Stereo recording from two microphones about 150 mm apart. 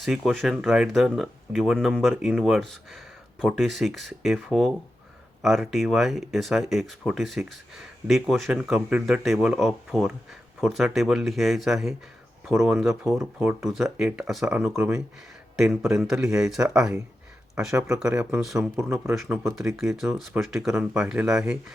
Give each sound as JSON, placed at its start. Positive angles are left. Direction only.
{"t": 0.0, "sound": "speech", "side_deg": 0}
{"t": 18.1, "sound": "speech", "side_deg": -15}
{"t": 18.3, "sound": "speech", "side_deg": -5}
{"t": 18.8, "sound": "speech", "side_deg": -20}
{"t": 19.1, "sound": "speech", "side_deg": -5}